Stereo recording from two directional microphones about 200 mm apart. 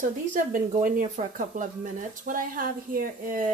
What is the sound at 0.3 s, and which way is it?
Speech, 40° right (ahead or behind).